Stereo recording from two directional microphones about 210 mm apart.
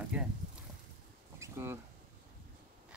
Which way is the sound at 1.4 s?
10° right (ahead or behind).